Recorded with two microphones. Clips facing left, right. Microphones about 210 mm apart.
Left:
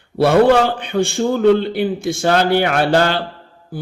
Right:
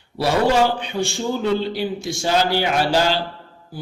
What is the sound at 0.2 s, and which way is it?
A man's voice, 55° left (ahead or behind).